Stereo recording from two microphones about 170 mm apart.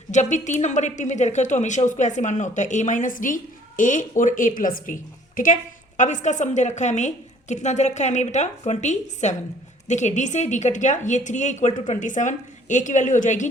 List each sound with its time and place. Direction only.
0.1 s a woman's voice: 45° left (ahead or behind)